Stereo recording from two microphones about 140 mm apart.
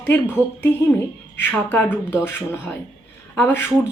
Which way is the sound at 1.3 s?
15° left (ahead or behind).